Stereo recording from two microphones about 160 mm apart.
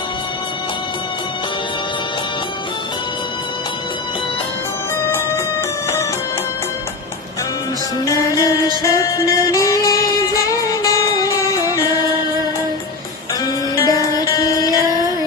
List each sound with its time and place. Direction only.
8.0 s music: 20° left (ahead or behind)
13.4 s music: 20° left (ahead or behind)